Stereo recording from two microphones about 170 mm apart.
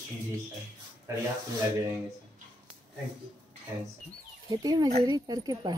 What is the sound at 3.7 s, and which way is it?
A child's voice, 15° right (ahead or behind).